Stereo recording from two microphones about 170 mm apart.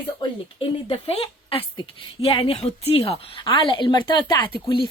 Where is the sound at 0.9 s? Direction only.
35° left (ahead or behind).